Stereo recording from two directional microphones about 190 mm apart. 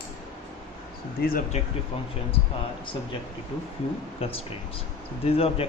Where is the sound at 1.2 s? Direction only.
50° left (ahead or behind).